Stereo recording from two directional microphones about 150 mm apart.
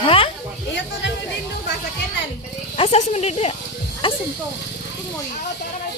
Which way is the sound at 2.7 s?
45° left (ahead or behind).